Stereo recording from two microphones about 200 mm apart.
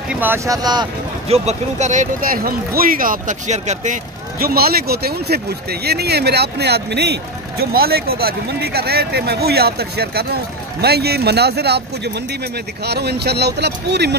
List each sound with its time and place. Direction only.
0.1 s speech: 10° right (ahead or behind)
1.3 s speech: 35° right (ahead or behind); by 14.1 s 55° right (ahead or behind)